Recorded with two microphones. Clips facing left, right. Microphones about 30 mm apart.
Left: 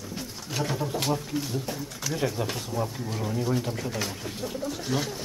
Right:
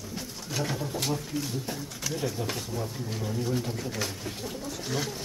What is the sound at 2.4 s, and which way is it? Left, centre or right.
Speech, centre.